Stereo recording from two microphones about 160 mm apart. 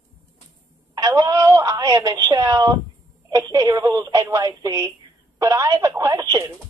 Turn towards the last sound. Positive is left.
turn(degrees=-20)  # may be behind; listen again after turning